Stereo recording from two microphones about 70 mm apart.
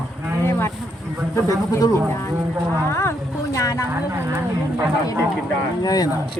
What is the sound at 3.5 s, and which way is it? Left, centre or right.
Speech, left.